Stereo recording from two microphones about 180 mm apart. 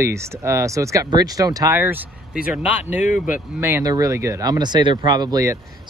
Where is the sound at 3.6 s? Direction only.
15° right (ahead or behind).